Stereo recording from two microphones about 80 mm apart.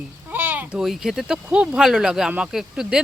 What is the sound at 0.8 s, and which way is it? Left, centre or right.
Speech, centre.